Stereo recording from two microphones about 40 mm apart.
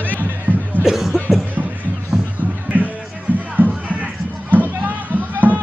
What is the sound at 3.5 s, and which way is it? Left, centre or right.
Music, right.